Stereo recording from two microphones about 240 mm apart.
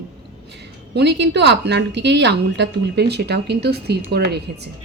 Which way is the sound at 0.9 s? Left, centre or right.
Right.